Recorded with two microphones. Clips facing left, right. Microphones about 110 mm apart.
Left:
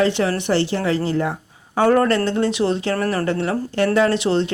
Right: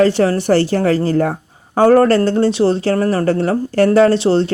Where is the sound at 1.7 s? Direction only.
35° right (ahead or behind).